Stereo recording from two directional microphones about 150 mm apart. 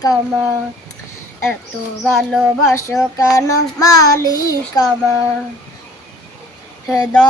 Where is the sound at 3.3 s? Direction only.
25° left (ahead or behind).